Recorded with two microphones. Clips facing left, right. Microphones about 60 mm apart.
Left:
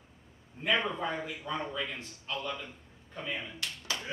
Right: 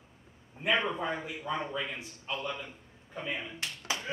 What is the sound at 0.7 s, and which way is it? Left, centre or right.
A man's voice, centre.